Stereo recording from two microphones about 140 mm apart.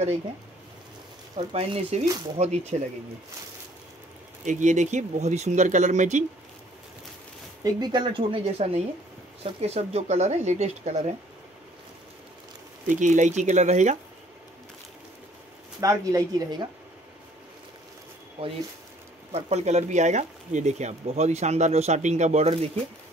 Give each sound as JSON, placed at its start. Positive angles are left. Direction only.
{"t": 1.3, "sound": "speech", "side_deg": -50}
{"t": 4.5, "sound": "speech", "side_deg": -60}
{"t": 7.6, "sound": "speech", "side_deg": -30}
{"t": 12.8, "sound": "speech", "side_deg": -65}
{"t": 15.8, "sound": "a woman's voice", "side_deg": -25}
{"t": 18.4, "sound": "speech", "side_deg": -45}